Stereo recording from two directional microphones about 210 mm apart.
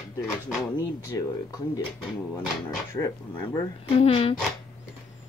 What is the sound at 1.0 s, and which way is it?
Speech, 15° left (ahead or behind).